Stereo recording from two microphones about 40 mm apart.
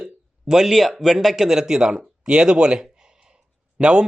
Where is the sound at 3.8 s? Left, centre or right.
Right.